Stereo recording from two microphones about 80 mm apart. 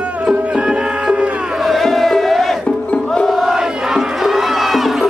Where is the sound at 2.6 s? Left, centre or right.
Centre.